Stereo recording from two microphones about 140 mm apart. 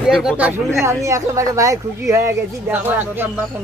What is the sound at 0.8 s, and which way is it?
Speech, 20° right (ahead or behind).